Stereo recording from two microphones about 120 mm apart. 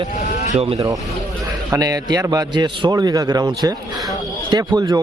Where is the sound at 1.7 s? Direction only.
30° right (ahead or behind).